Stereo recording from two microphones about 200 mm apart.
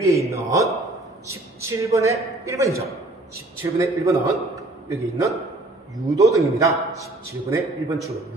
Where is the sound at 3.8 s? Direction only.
15° right (ahead or behind).